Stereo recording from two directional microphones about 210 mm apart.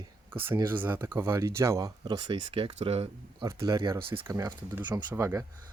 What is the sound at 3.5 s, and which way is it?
Speech, 15° right (ahead or behind).